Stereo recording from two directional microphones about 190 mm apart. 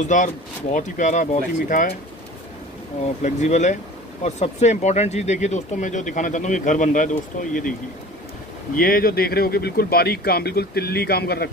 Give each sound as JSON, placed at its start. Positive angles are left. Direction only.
{"t": 0.0, "sound": "speech", "side_deg": 40}
{"t": 3.2, "sound": "speech", "side_deg": 40}
{"t": 8.7, "sound": "speech", "side_deg": 50}